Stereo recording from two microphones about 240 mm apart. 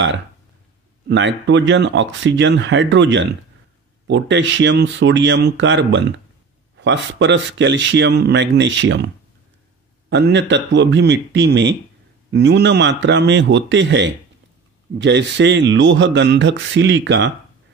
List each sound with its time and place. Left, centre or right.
1.0 s speech: right